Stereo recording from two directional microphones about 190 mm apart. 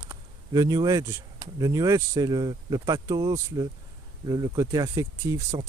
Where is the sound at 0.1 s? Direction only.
20° right (ahead or behind).